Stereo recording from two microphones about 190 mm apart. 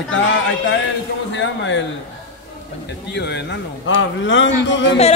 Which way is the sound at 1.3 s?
75° left (ahead or behind).